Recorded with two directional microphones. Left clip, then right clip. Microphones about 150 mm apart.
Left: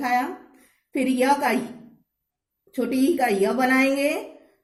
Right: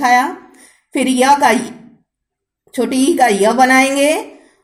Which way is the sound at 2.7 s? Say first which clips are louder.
Right 8 dB; 25° right (ahead or behind).